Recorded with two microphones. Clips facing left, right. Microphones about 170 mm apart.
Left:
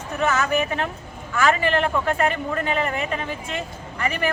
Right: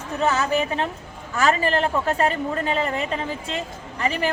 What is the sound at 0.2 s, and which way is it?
A woman's voice, 30° right (ahead or behind).